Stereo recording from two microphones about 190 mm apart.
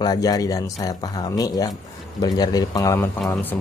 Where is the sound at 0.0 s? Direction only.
20° left (ahead or behind).